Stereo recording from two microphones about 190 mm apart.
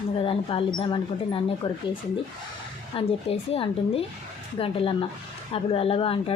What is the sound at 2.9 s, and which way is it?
Speech, 30° left (ahead or behind).